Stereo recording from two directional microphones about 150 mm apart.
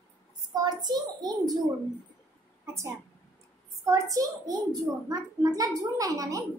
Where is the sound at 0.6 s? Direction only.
30° right (ahead or behind).